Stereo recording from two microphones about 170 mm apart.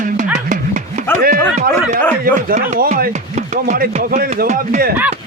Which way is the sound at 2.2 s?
60° right (ahead or behind).